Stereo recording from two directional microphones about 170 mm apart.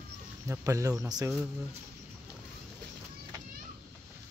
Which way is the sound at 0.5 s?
20° right (ahead or behind).